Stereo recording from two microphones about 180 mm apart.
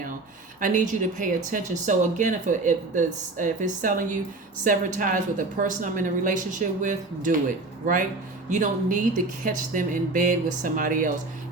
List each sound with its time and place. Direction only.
0.6 s speech: 45° right (ahead or behind)
8.4 s speech: 45° right (ahead or behind)